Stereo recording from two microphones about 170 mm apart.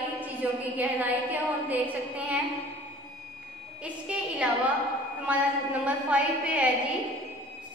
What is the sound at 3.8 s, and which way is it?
A woman's voice, 5° right (ahead or behind).